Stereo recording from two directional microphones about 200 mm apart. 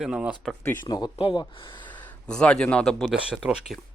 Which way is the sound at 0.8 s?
20° left (ahead or behind).